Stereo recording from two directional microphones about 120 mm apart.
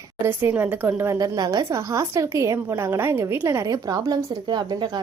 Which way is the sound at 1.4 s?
30° right (ahead or behind).